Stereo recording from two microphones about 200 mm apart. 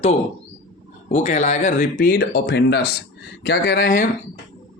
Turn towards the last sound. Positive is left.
turn(degrees=50)  # may be behind; listen again after turning